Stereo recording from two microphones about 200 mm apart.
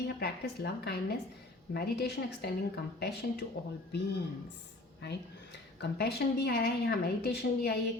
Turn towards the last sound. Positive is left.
turn(degrees=55)  # may be behind; listen again after turning